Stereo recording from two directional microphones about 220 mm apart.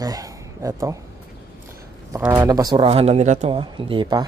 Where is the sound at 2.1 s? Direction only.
15° right (ahead or behind).